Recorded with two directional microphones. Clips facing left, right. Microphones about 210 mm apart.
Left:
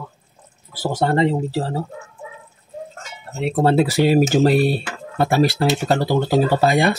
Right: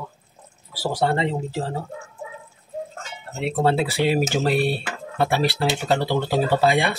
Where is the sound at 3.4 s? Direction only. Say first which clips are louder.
Left 4 dB; 45° left (ahead or behind).